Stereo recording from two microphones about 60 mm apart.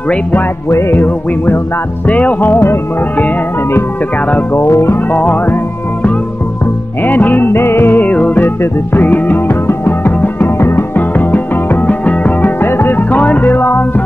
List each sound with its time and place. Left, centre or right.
0.7 s music: left
0.9 s music: left
2.0 s music: left
4.6 s music: left
5.1 s music: left
7.1 s music: left
11.0 s music: left